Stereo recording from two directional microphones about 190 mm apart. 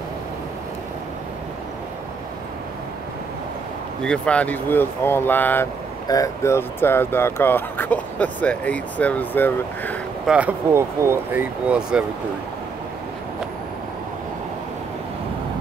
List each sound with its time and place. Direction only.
4.0 s speech: 5° left (ahead or behind)
10.2 s speech: 5° right (ahead or behind)